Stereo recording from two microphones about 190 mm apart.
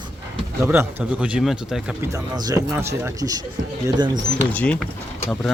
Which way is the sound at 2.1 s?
20° right (ahead or behind).